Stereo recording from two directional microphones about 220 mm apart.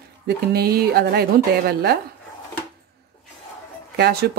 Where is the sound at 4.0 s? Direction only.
45° right (ahead or behind).